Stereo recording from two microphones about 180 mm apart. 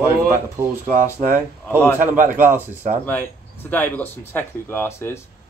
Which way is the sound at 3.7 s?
10° left (ahead or behind).